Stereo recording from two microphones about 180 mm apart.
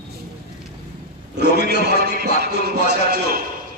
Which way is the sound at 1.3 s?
65° right (ahead or behind).